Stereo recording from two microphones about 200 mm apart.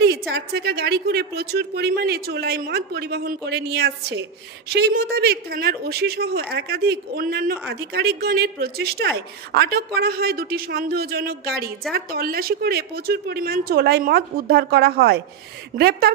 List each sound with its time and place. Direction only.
0.3 s speech: 50° right (ahead or behind)